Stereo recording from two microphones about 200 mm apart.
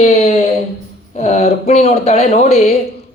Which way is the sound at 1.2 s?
35° left (ahead or behind).